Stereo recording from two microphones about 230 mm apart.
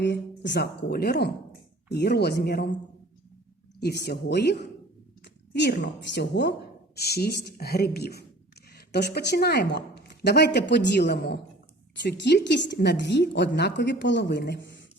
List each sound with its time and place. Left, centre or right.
0.0 s a woman's voice: left
3.8 s a woman's voice: left